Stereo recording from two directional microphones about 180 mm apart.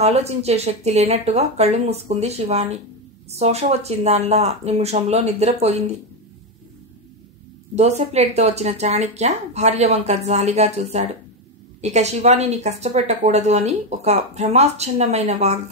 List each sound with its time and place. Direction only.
0.0 s a woman's voice: 35° right (ahead or behind)
8.1 s a woman's voice: 35° right (ahead or behind)